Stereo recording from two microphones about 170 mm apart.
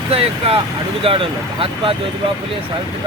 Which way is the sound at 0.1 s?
35° right (ahead or behind).